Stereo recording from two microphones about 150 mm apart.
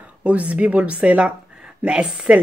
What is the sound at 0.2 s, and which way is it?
Speech, 10° right (ahead or behind).